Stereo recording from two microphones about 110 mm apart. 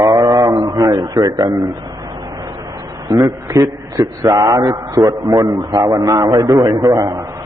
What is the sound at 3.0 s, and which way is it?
A man's voice, 35° right (ahead or behind).